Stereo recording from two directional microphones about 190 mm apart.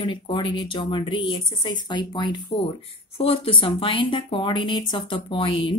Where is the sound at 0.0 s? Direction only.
25° left (ahead or behind).